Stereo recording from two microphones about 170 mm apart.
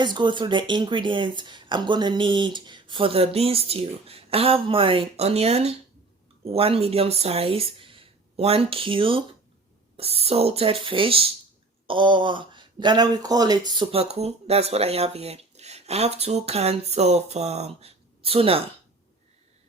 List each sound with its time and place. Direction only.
0.0 s speech: 25° right (ahead or behind)